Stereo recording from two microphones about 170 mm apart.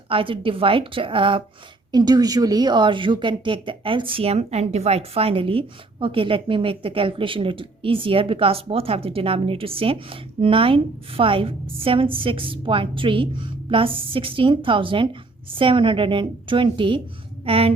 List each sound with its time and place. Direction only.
0.1 s a woman's voice: 30° right (ahead or behind)